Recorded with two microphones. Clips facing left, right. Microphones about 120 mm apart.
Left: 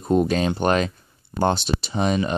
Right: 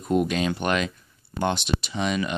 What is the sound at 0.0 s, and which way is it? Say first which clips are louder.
Speech: left 3 dB; 35° left (ahead or behind).